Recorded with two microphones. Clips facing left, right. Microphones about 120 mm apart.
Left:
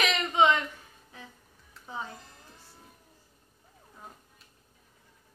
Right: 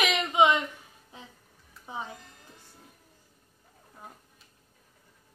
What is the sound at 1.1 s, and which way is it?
Music, 20° right (ahead or behind).